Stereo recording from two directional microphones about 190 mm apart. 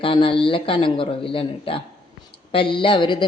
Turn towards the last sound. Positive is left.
turn(degrees=25)  # may be behind; listen again after turning